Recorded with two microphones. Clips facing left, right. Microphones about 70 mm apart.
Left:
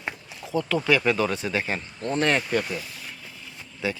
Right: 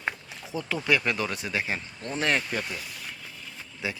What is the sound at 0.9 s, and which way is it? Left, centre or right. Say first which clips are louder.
Speech: left 3 dB; centre.